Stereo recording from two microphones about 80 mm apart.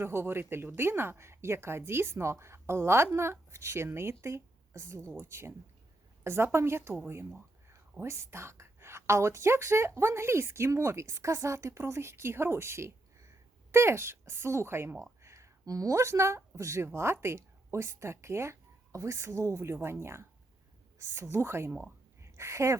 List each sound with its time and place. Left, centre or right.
0.0 s a woman's voice: right